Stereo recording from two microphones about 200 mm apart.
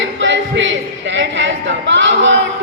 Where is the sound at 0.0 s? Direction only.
65° right (ahead or behind).